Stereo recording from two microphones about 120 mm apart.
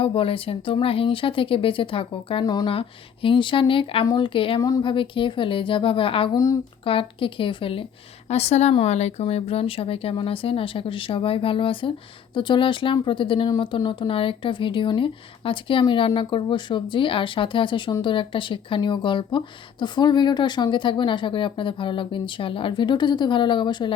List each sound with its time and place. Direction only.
0.0 s speech: 50° left (ahead or behind)
2.4 s a woman's voice: 35° left (ahead or behind)
2.6 s speech: 50° left (ahead or behind)
6.3 s speech: 25° left (ahead or behind)
6.8 s speech: 45° left (ahead or behind)
8.3 s a woman's voice: 65° left (ahead or behind); by 23.9 s 40° left (ahead or behind)